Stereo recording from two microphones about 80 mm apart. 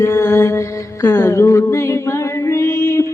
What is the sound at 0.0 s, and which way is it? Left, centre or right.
Mantra, left.